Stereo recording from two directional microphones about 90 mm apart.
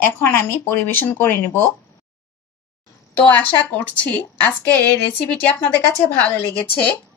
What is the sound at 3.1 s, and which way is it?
A woman's voice, 15° left (ahead or behind).